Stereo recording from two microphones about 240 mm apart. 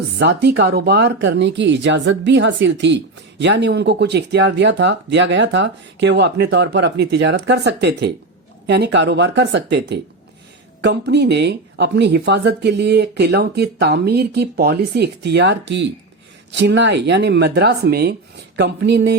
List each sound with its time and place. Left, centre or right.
0.2 s speech: right